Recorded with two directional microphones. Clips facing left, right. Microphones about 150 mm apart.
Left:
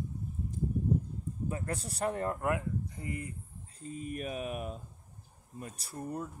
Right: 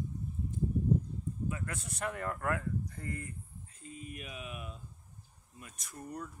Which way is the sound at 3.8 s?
40° left (ahead or behind).